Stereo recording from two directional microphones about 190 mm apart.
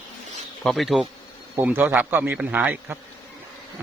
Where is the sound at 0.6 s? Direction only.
Centre (ahead or behind).